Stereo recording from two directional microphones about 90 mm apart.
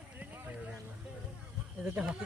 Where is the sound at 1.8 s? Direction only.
15° right (ahead or behind).